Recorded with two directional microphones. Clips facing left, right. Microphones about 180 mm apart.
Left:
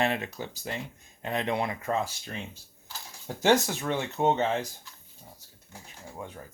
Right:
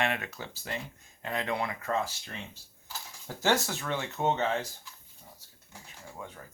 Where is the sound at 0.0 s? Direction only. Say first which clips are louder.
Left 3 dB; 30° left (ahead or behind).